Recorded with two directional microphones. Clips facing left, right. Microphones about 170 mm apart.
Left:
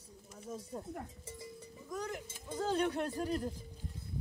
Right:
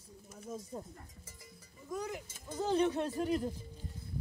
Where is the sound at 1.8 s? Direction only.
10° right (ahead or behind).